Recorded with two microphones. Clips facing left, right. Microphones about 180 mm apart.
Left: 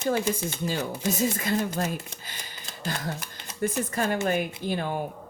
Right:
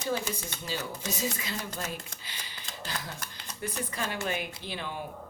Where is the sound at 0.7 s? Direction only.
50° left (ahead or behind).